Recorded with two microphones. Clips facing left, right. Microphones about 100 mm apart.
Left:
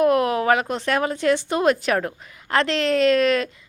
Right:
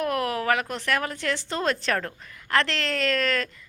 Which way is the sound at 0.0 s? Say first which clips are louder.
Left 8 dB; 20° left (ahead or behind).